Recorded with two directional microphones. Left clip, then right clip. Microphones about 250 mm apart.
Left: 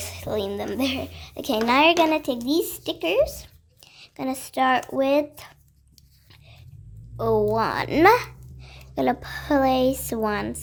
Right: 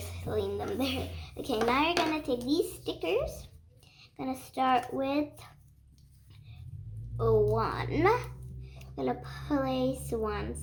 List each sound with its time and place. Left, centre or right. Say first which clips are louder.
0.0 s a woman's voice: left 6 dB; left
7.2 s a woman's voice: left 5 dB; left